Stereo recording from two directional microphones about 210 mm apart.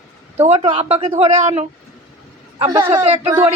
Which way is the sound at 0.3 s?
30° right (ahead or behind).